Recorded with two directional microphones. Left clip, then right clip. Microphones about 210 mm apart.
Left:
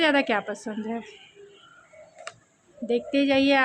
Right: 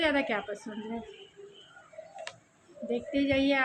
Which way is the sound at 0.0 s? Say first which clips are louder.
Left 6 dB; 55° left (ahead or behind).